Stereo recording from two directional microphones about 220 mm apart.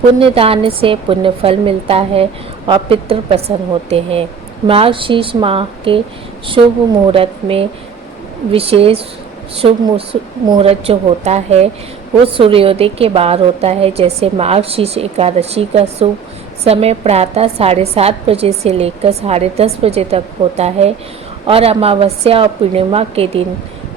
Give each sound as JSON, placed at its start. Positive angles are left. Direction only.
{"t": 0.2, "sound": "a woman's voice", "side_deg": -25}